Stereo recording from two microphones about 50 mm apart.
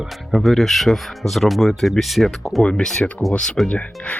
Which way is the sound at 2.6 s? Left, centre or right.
Centre.